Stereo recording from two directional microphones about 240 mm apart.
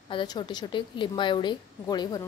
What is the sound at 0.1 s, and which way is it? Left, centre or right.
A woman's voice, left.